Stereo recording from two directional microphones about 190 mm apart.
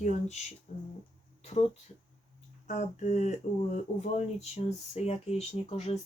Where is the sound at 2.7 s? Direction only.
40° left (ahead or behind).